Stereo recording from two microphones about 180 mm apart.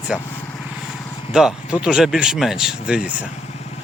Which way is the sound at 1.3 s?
5° right (ahead or behind).